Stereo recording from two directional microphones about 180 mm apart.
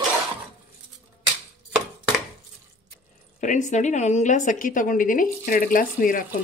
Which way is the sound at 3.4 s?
45° left (ahead or behind).